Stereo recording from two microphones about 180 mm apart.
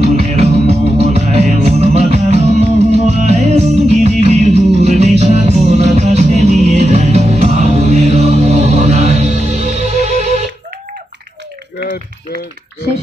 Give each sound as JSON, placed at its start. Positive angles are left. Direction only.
{"t": 0.0, "sound": "music", "side_deg": -35}